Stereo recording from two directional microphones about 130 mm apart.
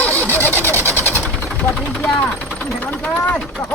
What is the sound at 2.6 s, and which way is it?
Speech, 10° left (ahead or behind).